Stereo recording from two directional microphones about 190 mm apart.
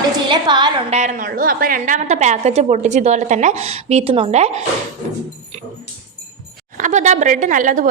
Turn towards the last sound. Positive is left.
turn(degrees=-45)  # may be behind; listen again after turning